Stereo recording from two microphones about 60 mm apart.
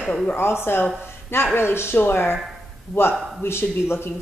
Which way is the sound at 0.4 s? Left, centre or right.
Left.